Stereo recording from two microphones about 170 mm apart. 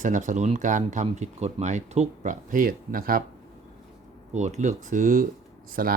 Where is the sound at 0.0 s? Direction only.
45° right (ahead or behind).